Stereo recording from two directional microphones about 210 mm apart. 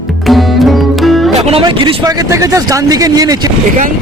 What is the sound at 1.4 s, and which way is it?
Speech, 25° right (ahead or behind).